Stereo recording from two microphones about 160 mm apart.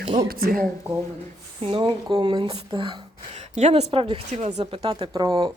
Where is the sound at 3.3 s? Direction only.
45° right (ahead or behind); by 5.5 s 25° right (ahead or behind).